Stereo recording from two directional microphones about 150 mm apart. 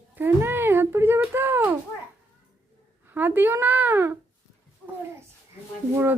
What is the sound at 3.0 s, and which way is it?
Speech, 15° right (ahead or behind).